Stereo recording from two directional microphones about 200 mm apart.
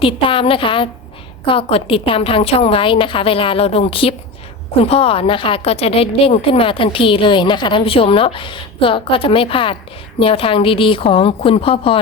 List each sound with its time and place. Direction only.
0.0 s a woman's voice: 25° left (ahead or behind)